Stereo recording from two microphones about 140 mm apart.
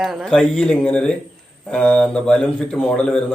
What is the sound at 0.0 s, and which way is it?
A man's voice, centre (ahead or behind).